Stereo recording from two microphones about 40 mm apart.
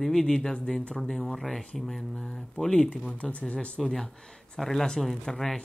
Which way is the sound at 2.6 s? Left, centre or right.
Left.